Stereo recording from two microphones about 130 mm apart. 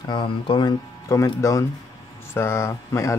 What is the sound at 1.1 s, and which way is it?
Speech, 25° left (ahead or behind).